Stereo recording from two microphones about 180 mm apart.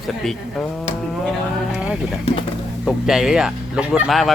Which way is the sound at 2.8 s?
Centre (ahead or behind).